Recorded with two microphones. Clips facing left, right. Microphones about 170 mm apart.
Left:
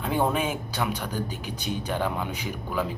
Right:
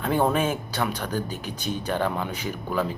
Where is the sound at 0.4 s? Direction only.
15° left (ahead or behind).